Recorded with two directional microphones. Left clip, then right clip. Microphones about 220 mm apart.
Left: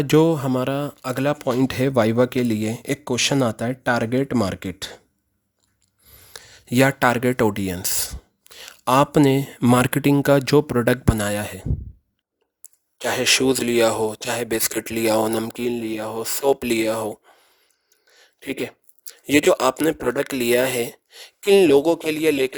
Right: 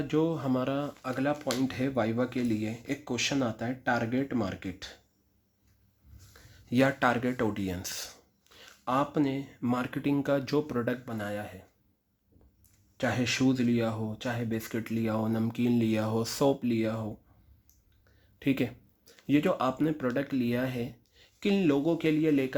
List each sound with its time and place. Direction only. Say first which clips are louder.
0.0 s speech: left 12 dB; 50° left (ahead or behind)
6.3 s speech: left 9 dB; 45° left (ahead or behind)
13.1 s speech: left 11 dB; 60° left (ahead or behind); by 16.6 s 35° left (ahead or behind)
16.6 s speech: left 10 dB; 60° left (ahead or behind)